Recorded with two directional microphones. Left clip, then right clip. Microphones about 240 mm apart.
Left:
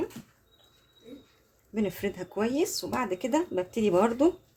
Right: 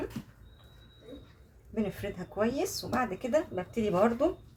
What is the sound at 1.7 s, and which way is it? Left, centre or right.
Speech, left.